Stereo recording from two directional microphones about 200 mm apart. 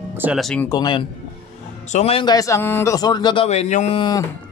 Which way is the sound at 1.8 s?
35° left (ahead or behind).